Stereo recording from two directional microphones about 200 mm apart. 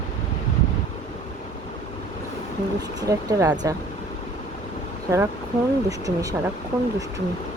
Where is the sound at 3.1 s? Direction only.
15° right (ahead or behind).